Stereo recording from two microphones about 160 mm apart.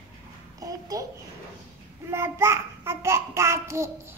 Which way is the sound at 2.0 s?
15° right (ahead or behind).